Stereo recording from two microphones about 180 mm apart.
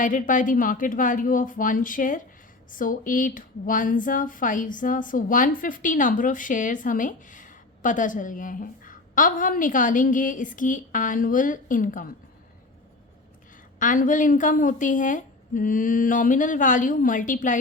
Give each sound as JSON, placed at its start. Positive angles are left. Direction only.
{"t": 0.0, "sound": "speech", "side_deg": 45}
{"t": 13.7, "sound": "speech", "side_deg": 45}